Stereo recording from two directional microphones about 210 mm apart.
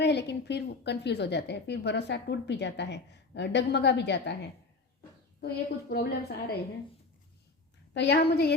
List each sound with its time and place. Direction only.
0.0 s a woman's voice: 55° left (ahead or behind)
5.9 s a woman's voice: 50° left (ahead or behind)
7.9 s a woman's voice: 50° left (ahead or behind)